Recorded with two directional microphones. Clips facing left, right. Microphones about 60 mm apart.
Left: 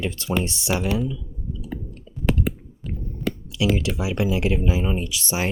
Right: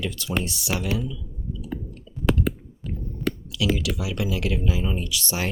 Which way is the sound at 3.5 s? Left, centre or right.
Left.